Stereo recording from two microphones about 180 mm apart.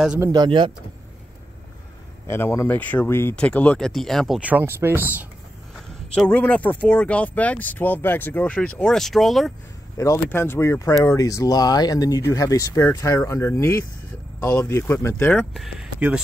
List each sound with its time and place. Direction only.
0.2 s speech: 20° right (ahead or behind)
2.2 s speech: 15° left (ahead or behind); by 5.2 s 10° right (ahead or behind)
6.1 s speech: 5° left (ahead or behind)
9.9 s speech: 15° left (ahead or behind)
15.5 s speech: centre (ahead or behind)